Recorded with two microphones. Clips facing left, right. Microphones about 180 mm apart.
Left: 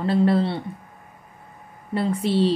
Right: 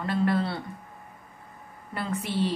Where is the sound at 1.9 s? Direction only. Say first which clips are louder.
Left 8 dB; 30° left (ahead or behind).